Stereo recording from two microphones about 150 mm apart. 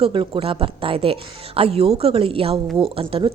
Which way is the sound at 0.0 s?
35° right (ahead or behind).